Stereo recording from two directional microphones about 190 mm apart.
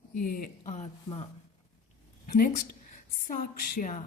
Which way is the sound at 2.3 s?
50° left (ahead or behind).